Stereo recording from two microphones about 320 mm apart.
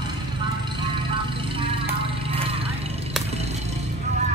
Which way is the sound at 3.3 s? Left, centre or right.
Centre.